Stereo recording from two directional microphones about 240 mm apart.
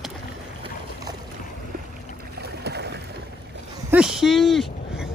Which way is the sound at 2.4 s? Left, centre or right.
Right.